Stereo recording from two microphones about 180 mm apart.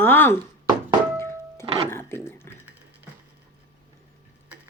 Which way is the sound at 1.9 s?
10° left (ahead or behind).